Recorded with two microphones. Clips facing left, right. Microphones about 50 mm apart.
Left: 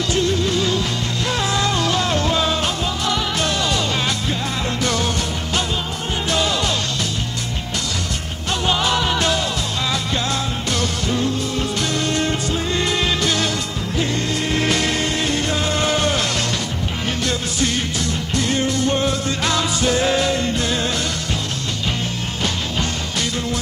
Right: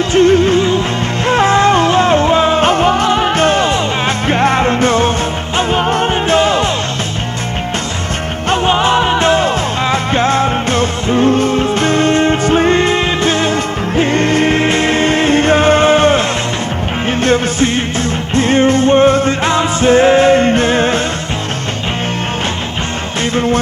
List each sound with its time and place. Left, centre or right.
0.1 s music: right
4.3 s music: right
5.6 s music: right
6.2 s music: right
8.5 s music: right
23.3 s music: right